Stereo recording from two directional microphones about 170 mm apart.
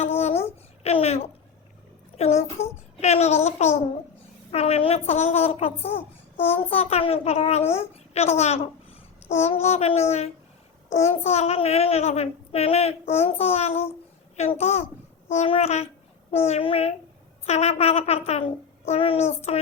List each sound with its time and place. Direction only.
0.0 s a sound: 35° left (ahead or behind)
2.1 s a child's voice: 40° left (ahead or behind)
2.6 s child singing: 15° left (ahead or behind)
3.0 s a child's voice: 40° left (ahead or behind)
11.3 s a child's voice: 40° left (ahead or behind)